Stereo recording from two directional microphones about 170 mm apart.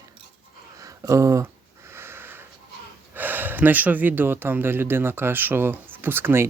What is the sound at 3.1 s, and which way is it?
Speech, 10° right (ahead or behind).